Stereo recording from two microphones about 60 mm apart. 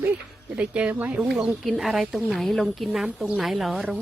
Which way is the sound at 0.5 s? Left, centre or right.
Centre.